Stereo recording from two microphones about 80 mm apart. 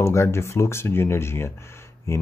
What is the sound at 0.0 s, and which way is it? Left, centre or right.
Speech, left.